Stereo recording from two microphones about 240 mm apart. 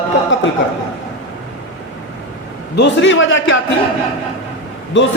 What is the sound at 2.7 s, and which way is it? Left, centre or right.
Speech, left.